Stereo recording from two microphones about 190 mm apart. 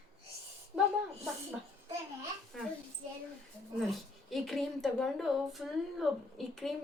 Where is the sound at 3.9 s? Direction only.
Centre (ahead or behind).